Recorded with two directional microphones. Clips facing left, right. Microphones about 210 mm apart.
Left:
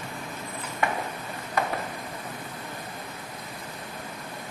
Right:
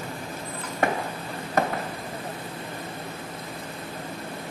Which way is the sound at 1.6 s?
45° right (ahead or behind).